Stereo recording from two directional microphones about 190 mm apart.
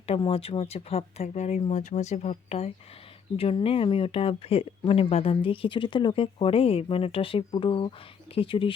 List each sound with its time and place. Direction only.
0.0 s speech: 30° left (ahead or behind)